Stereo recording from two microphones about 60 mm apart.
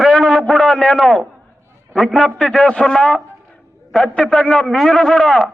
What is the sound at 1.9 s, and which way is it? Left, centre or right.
A man's voice, centre.